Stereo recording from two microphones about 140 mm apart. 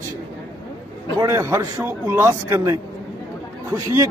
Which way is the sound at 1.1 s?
20° right (ahead or behind).